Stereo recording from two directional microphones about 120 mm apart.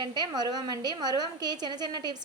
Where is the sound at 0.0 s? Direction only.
35° right (ahead or behind).